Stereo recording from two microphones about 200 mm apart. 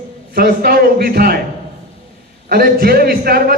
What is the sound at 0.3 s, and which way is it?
A man's voice, 50° right (ahead or behind).